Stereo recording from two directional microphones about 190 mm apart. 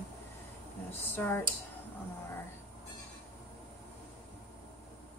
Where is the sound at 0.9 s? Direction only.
10° left (ahead or behind).